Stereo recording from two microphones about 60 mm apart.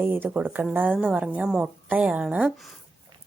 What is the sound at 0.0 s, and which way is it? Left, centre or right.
A woman's voice, right.